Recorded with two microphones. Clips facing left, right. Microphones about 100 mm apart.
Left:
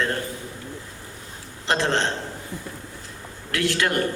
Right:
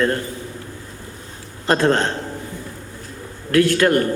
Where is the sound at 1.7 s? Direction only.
45° right (ahead or behind).